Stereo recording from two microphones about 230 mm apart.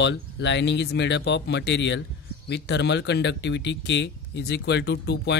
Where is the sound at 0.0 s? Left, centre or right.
Left.